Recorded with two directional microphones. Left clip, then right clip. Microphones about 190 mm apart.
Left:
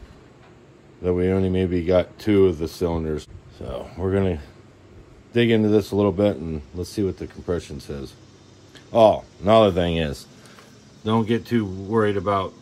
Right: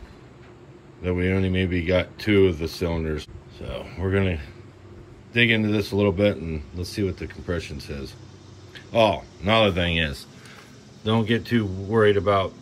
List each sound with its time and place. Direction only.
1.0 s speech: 15° left (ahead or behind)